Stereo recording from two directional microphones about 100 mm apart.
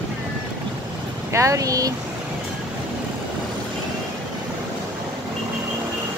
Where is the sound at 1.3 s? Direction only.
35° right (ahead or behind).